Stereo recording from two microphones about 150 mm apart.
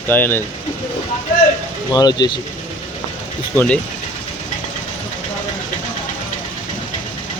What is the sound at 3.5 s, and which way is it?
Speech, 10° left (ahead or behind).